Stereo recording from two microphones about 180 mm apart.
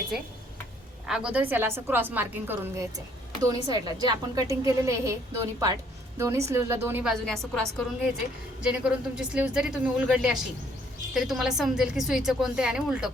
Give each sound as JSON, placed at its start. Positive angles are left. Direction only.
{"t": 1.0, "sound": "a woman's voice", "side_deg": -5}
{"t": 7.1, "sound": "a woman's voice", "side_deg": 5}
{"t": 8.6, "sound": "a woman's voice", "side_deg": -5}